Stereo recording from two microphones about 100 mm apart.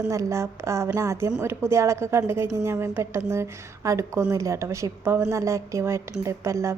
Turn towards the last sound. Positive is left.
turn(degrees=-30)  # may be behind; listen again after turning